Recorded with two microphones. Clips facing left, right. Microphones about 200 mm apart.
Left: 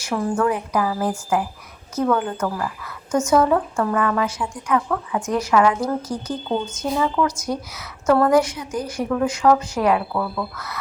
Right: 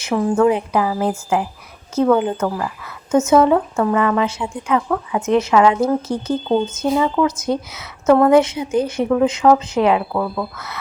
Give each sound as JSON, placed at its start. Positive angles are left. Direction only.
{"t": 0.0, "sound": "a woman's voice", "side_deg": -15}